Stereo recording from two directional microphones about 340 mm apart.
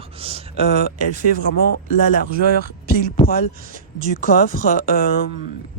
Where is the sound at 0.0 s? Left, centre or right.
Centre.